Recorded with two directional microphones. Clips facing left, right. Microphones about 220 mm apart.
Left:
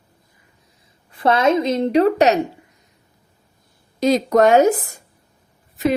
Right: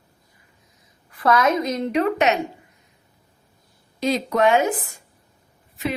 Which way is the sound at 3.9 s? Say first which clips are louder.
Left 6 dB; 40° left (ahead or behind).